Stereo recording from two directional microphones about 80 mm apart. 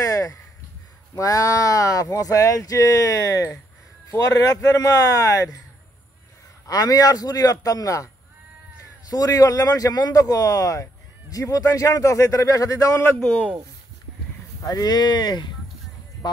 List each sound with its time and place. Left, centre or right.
0.0 s a sound: left
1.1 s speech: left
6.6 s speech: left
9.1 s speech: left
14.6 s speech: left